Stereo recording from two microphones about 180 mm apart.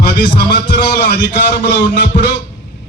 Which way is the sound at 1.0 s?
65° left (ahead or behind).